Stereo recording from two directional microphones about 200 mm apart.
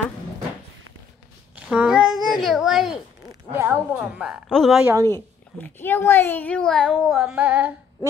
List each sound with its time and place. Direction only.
1.7 s a woman's voice: 5° right (ahead or behind)
5.1 s a woman's voice: 10° left (ahead or behind); by 8.1 s 5° right (ahead or behind)